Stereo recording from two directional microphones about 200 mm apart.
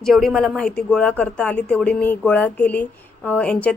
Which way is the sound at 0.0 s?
Centre (ahead or behind).